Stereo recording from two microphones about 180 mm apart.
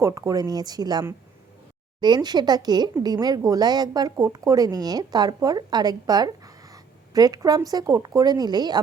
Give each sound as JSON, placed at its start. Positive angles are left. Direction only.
{"t": 0.0, "sound": "speech", "side_deg": -15}